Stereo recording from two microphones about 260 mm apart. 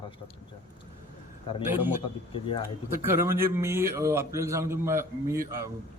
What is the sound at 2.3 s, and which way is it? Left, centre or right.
Speech, left.